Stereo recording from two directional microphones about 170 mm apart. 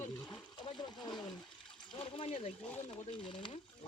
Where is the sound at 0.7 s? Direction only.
25° left (ahead or behind).